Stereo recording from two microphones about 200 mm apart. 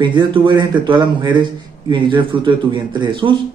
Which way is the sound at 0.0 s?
25° right (ahead or behind).